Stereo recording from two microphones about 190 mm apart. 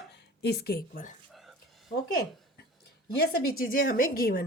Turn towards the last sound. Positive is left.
turn(degrees=50)  # may be behind; listen again after turning